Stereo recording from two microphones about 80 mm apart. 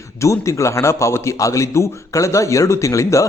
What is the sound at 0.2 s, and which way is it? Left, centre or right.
A man's voice, left.